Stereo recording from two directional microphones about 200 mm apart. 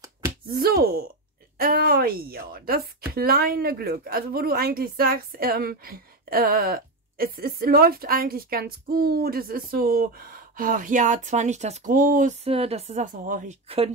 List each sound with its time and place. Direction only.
0.5 s speech: 50° right (ahead or behind); by 13.8 s 35° right (ahead or behind)